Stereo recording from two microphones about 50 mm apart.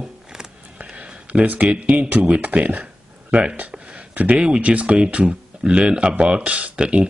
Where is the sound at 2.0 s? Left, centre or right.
Right.